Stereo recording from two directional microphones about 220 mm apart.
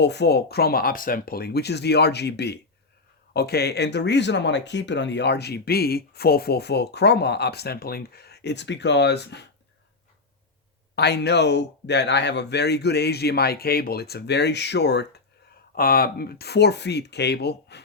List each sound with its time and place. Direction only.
0.0 s speech: 50° left (ahead or behind)
10.9 s speech: 50° left (ahead or behind)